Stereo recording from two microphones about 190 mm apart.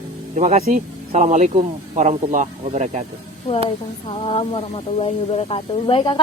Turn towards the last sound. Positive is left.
turn(degrees=25)  # may be behind; listen again after turning